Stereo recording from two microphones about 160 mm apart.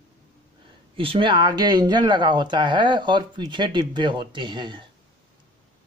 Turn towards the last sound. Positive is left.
turn(degrees=-30)  # may be behind; listen again after turning